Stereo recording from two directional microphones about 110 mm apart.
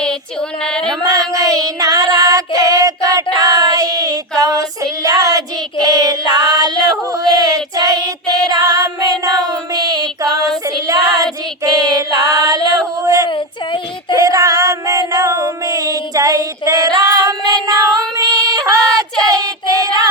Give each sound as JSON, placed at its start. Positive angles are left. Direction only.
{"t": 0.6, "sound": "a sound", "side_deg": 5}
{"t": 1.3, "sound": "child singing", "side_deg": -30}
{"t": 14.2, "sound": "female singing", "side_deg": -30}
{"t": 19.2, "sound": "child singing", "side_deg": -35}